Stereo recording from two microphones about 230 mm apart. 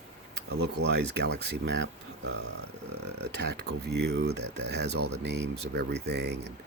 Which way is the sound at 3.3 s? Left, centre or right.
Right.